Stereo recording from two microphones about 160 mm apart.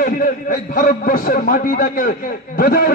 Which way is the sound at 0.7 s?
65° left (ahead or behind).